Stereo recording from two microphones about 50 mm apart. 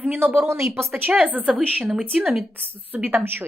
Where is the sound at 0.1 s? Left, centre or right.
Right.